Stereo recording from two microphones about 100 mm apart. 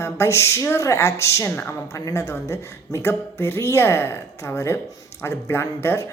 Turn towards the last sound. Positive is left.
turn(degrees=25)  # may be behind; listen again after turning